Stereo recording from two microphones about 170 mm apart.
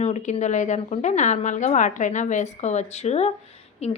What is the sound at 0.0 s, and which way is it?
A woman's voice, 45° left (ahead or behind).